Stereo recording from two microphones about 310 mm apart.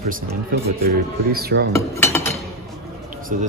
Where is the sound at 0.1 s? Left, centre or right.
Right.